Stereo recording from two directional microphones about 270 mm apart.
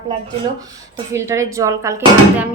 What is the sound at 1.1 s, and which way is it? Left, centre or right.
Speech, centre.